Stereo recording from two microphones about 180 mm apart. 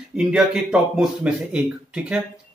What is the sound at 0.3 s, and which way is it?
Speech, 5° right (ahead or behind).